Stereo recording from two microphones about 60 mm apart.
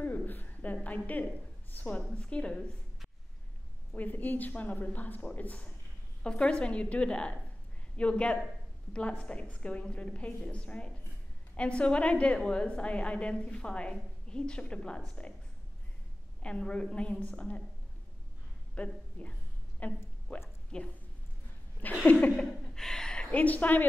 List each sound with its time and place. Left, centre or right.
0.0 s a sound: left
1.7 s a woman's voice: left
2.0 s a woman's voice: centre
3.9 s a woman's voice: left
16.4 s a woman's voice: centre
18.8 s a woman's voice: left
21.8 s a woman's voice: left
22.4 s a sound: centre
23.3 s a woman's voice: left